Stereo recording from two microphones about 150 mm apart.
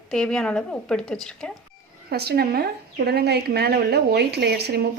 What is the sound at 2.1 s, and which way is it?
A woman's voice, 90° right.